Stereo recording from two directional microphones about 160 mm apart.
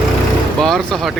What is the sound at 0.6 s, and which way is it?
Speech, centre (ahead or behind).